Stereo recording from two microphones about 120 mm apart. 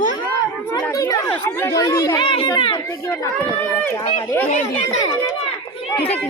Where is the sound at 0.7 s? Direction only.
30° left (ahead or behind).